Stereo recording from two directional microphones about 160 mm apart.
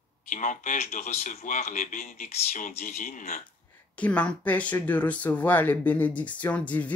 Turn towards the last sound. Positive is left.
turn(degrees=10)  # may be behind; listen again after turning